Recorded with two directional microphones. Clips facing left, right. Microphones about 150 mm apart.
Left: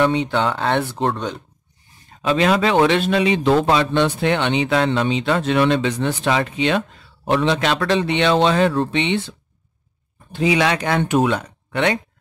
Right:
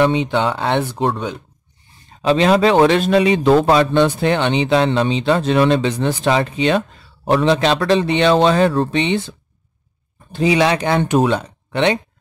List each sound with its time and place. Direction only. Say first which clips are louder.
0.0 s speech: right 2 dB; 20° right (ahead or behind)
2.2 s a man's voice: right 4 dB; 30° right (ahead or behind)
10.3 s a man's voice: right 3 dB; 35° right (ahead or behind)